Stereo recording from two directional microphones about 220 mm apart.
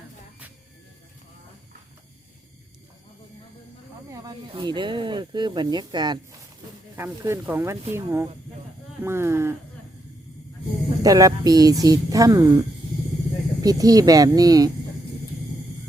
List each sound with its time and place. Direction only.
4.1 s a woman's voice: 15° right (ahead or behind)
11.0 s a woman's voice: 15° right (ahead or behind)
13.6 s a woman's voice: 15° right (ahead or behind)